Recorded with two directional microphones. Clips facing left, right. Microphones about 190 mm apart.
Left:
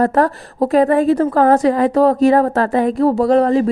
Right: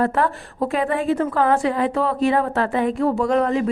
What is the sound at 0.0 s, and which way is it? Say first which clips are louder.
A woman's voice: left 5 dB; 40° left (ahead or behind).